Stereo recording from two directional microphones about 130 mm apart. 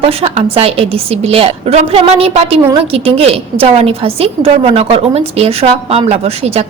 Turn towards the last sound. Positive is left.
turn(degrees=-55)  # may be behind; listen again after turning